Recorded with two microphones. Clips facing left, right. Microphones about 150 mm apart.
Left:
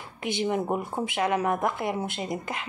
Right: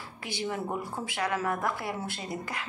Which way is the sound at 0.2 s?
20° left (ahead or behind).